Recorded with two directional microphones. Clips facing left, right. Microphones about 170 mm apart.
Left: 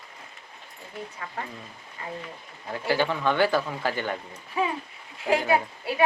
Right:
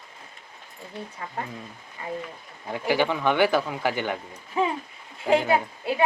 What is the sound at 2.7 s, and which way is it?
A woman's voice, 15° right (ahead or behind).